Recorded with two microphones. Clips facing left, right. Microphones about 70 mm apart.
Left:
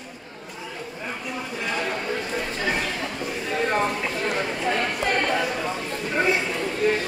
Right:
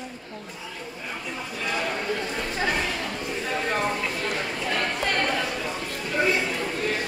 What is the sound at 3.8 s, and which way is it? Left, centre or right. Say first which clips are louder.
Chatter: left 1 dB; centre.